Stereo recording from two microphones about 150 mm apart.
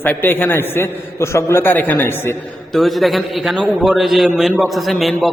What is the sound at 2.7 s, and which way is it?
A man's voice, centre (ahead or behind).